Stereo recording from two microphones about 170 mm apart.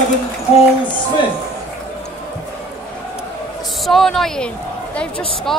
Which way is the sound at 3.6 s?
Centre (ahead or behind).